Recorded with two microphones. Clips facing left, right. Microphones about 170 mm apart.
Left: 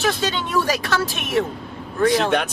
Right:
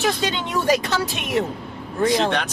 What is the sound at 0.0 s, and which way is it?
Speech, 20° right (ahead or behind).